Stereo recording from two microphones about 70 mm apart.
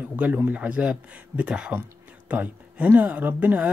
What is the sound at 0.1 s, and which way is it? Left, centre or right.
Speech, right.